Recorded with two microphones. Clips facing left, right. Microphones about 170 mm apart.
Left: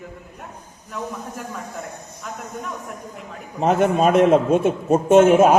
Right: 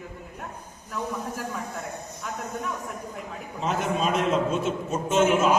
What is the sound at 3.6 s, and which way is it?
A man's voice, 60° left (ahead or behind).